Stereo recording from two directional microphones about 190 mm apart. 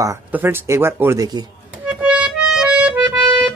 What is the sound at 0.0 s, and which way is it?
Speech, 10° right (ahead or behind).